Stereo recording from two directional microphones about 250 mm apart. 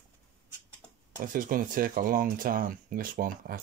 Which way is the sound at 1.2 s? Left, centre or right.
Right.